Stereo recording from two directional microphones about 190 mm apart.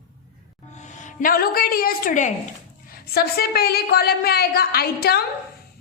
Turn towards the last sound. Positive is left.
turn(degrees=55)  # may be behind; listen again after turning